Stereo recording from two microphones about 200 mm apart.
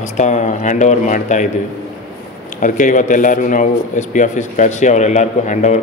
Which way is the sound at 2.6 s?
40° left (ahead or behind).